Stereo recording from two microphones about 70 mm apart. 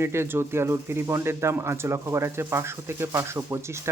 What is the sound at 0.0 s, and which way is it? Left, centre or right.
Speech, right.